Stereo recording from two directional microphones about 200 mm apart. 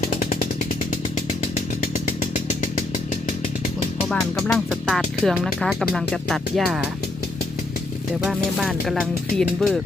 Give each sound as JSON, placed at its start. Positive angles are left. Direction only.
{"t": 0.0, "sound": "chainsaw", "side_deg": 40}
{"t": 4.4, "sound": "speech", "side_deg": 0}
{"t": 8.2, "sound": "speech", "side_deg": 0}